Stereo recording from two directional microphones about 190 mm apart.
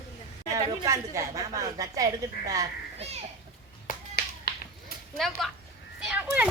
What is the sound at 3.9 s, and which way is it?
Music, 55° left (ahead or behind).